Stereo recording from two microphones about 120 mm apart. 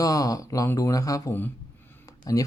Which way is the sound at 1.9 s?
30° left (ahead or behind).